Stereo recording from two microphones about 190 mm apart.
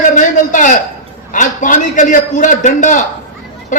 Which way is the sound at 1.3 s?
45° left (ahead or behind).